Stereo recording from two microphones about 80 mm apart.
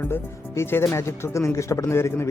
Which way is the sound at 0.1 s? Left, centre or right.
Left.